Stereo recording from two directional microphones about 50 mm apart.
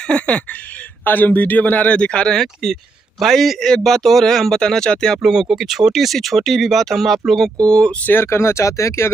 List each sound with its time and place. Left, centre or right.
0.0 s speech: centre
1.0 s speech: left
2.3 s speech: centre
5.2 s speech: centre
7.7 s speech: centre
8.0 s speech: left
8.3 s speech: left